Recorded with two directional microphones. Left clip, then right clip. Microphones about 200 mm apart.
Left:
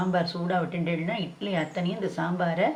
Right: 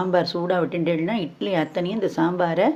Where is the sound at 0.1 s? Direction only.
55° right (ahead or behind).